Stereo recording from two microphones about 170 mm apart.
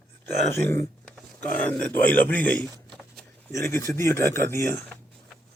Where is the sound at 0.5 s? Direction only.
15° left (ahead or behind).